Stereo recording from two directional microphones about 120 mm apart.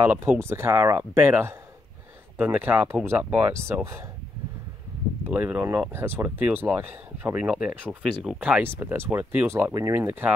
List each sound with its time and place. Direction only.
0.1 s speech: 20° right (ahead or behind)
5.3 s speech: 15° right (ahead or behind)
8.0 s speech: centre (ahead or behind); by 10.0 s 20° right (ahead or behind)